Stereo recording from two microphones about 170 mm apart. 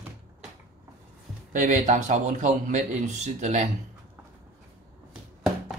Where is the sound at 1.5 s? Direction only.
45° right (ahead or behind).